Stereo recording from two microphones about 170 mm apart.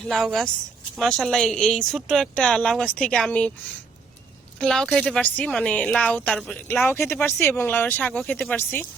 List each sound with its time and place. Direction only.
0.0 s speech: centre (ahead or behind)
4.6 s speech: 5° left (ahead or behind)